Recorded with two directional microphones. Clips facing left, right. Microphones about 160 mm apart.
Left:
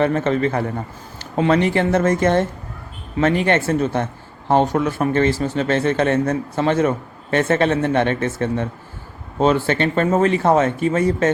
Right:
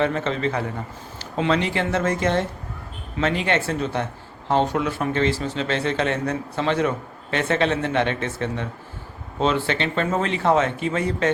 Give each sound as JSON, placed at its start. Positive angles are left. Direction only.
{"t": 0.0, "sound": "a man's voice", "side_deg": 50}